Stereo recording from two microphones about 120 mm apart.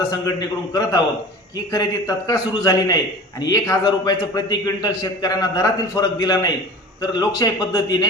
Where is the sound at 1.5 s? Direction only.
30° left (ahead or behind).